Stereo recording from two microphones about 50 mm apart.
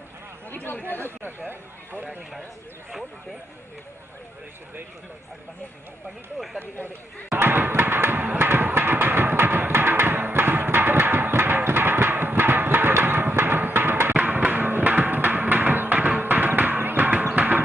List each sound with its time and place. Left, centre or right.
0.5 s chatter: left
0.8 s speech: left
1.5 s speech: right
6.3 s speech: centre
7.2 s a sound: right
14.1 s music: right